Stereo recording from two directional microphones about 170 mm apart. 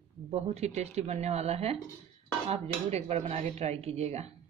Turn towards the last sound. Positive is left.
turn(degrees=-40)  # may be behind; listen again after turning